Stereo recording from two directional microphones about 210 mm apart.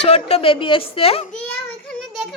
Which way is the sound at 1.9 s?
Centre (ahead or behind).